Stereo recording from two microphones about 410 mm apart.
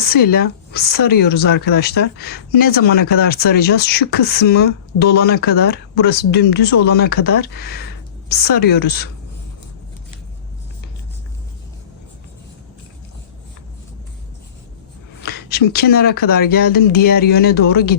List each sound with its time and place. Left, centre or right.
0.0 s speech: left
15.2 s speech: left